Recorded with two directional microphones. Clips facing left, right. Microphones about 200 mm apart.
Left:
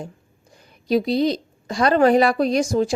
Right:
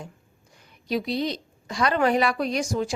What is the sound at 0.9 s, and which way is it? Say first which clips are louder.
A woman's voice: left 7 dB; 35° left (ahead or behind).